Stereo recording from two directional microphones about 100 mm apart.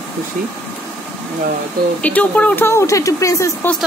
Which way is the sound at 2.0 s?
15° left (ahead or behind).